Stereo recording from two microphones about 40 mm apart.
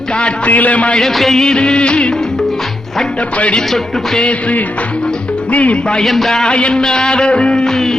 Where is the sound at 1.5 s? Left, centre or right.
Left.